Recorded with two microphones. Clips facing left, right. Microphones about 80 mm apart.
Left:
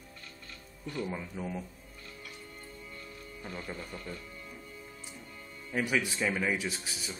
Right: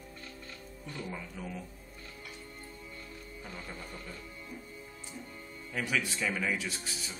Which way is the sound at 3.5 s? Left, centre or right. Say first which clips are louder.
Left 4 dB; centre.